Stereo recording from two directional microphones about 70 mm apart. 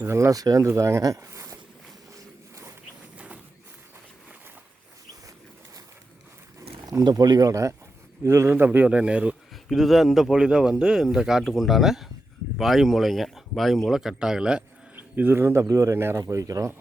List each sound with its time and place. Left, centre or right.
0.1 s a man's voice: right
0.3 s speech: right
0.8 s speech: right
2.1 s a sound: right
3.2 s a sound: right
6.8 s speech: right; by 9.3 s centre
9.6 s a man's voice: centre
14.9 s a man's voice: right
16.2 s speech: right